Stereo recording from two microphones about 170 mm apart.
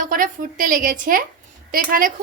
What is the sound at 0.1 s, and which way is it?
A woman's voice, 55° right (ahead or behind).